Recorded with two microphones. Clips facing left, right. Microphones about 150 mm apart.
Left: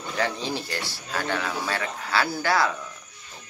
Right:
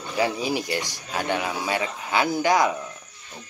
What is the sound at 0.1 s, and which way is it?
A man's voice, 10° right (ahead or behind).